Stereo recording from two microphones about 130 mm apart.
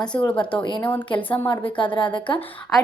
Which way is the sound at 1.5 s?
40° left (ahead or behind).